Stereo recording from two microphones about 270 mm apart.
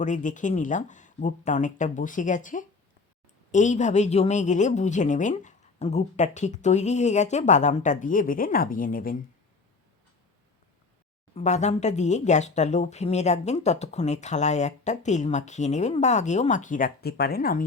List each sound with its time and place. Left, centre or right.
0.0 s speech: left
11.3 s speech: left